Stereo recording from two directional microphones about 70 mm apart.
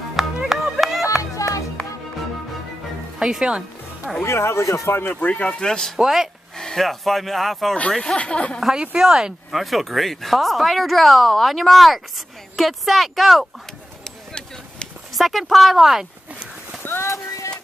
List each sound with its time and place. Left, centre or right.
0.1 s music: centre
1.3 s music: left
1.8 s music: centre
3.2 s speech: centre
4.2 s speech: left
5.1 s speech: centre
5.9 s speech: centre
6.6 s speech: centre
8.0 s speech: centre
8.5 s speech: centre
15.1 s speech: centre
16.8 s clip-clop: left